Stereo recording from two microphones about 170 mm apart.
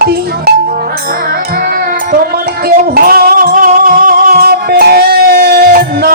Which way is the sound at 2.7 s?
60° right (ahead or behind).